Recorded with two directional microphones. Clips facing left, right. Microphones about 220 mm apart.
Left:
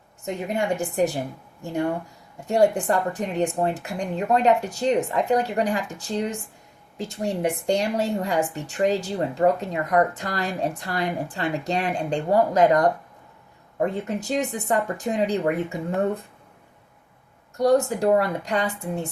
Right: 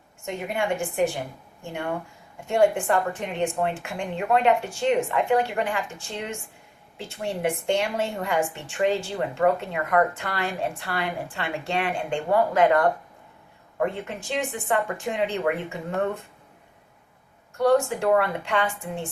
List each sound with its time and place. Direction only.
0.4 s a woman's voice: 40° left (ahead or behind)
13.9 s a woman's voice: 40° left (ahead or behind)
17.6 s a woman's voice: 40° left (ahead or behind)